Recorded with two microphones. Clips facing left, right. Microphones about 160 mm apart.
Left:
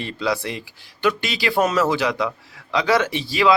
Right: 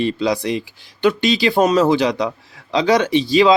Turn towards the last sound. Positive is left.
turn(degrees=-20)  # may be behind; listen again after turning